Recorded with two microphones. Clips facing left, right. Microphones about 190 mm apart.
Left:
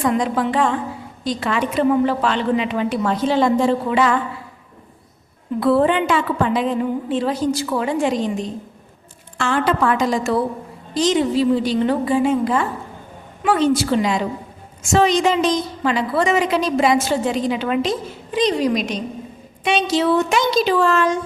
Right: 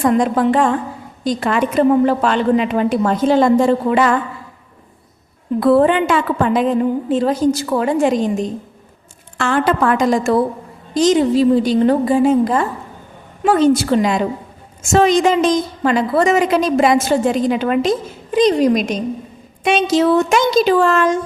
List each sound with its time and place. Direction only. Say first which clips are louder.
0.0 s a woman's voice: right 5 dB; 45° right (ahead or behind)
5.5 s a woman's voice: right 4 dB; 50° right (ahead or behind)